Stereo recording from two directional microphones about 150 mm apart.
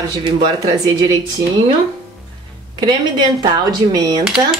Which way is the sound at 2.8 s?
30° right (ahead or behind).